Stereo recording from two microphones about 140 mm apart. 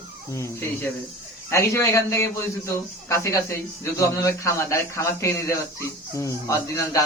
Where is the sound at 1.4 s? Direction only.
20° left (ahead or behind).